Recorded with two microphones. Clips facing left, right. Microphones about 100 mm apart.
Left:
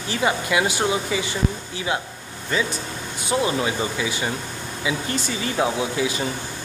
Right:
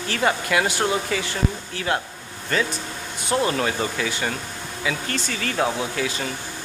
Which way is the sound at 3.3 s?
10° left (ahead or behind).